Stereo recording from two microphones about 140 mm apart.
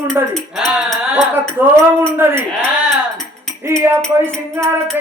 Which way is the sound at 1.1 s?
15° right (ahead or behind).